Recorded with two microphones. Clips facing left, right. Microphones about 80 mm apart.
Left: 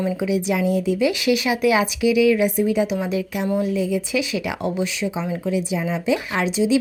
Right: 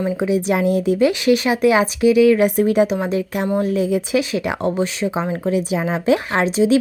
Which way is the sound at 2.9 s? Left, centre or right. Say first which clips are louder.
Right 3 dB; right.